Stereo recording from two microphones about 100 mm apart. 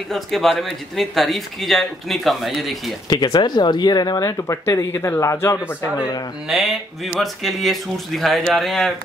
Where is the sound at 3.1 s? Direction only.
45° left (ahead or behind); by 5.6 s 25° left (ahead or behind).